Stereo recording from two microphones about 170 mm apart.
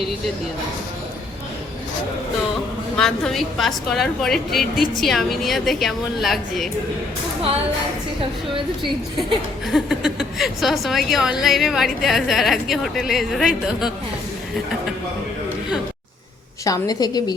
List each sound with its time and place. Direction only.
2.9 s a woman's voice: 5° left (ahead or behind)
9.6 s a woman's voice: centre (ahead or behind)
16.6 s a woman's voice: 20° left (ahead or behind)